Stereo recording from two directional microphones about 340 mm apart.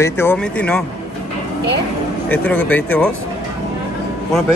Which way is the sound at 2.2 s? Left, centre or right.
Centre.